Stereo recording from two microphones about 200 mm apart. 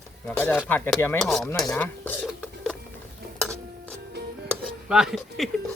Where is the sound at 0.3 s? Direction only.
10° left (ahead or behind).